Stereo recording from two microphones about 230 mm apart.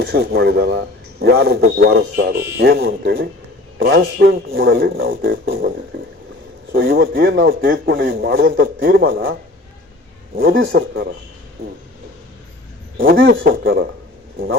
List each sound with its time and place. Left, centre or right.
0.0 s a man's voice: right
10.3 s a man's voice: right
13.4 s a man's voice: right